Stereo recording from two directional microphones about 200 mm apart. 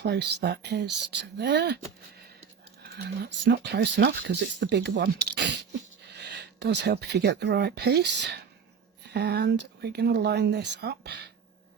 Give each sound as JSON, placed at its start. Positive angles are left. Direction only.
{"t": 0.0, "sound": "speech", "side_deg": -55}
{"t": 2.9, "sound": "speech", "side_deg": -60}